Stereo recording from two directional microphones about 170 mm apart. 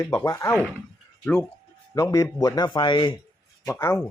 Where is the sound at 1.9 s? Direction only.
20° left (ahead or behind).